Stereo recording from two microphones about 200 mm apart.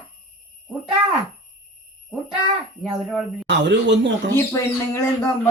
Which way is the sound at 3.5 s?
60° right (ahead or behind).